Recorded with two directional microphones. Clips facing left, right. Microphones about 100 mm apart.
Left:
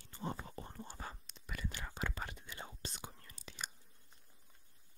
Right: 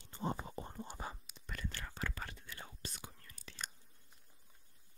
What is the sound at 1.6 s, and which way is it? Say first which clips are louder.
Whispering: left 1 dB; 15° left (ahead or behind).